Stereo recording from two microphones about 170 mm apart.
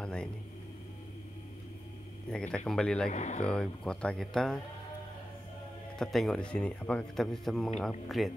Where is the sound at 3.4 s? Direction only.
5° left (ahead or behind).